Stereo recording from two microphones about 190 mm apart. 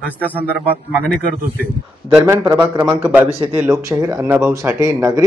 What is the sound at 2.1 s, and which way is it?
A man's voice, 10° right (ahead or behind).